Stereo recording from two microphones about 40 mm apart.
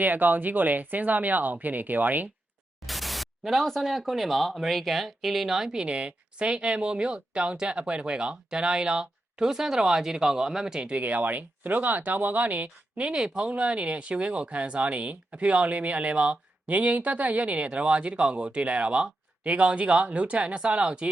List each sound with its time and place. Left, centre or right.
0.0 s speech: right
2.8 s static: centre
3.7 s speech: centre
5.8 s speech: right
10.8 s speech: right
13.1 s speech: right
13.5 s speech: right